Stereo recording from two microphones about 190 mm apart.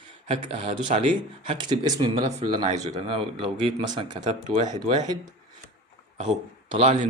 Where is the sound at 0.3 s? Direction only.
30° right (ahead or behind).